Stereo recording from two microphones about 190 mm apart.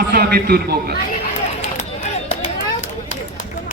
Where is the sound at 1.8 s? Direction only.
35° left (ahead or behind).